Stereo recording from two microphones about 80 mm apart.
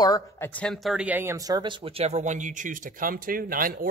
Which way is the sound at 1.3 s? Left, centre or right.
Right.